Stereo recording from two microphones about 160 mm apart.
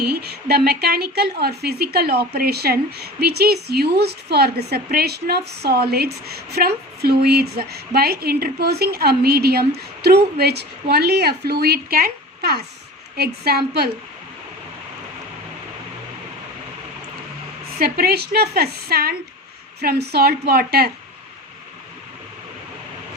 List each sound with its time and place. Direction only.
0.1 s a woman's voice: 80° right
17.7 s a woman's voice: 75° right (ahead or behind)